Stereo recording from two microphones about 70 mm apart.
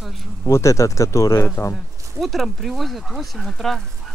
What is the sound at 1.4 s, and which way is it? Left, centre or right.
Speech, left.